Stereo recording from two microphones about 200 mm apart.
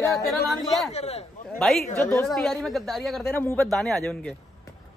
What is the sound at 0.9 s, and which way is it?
Speech, 30° left (ahead or behind).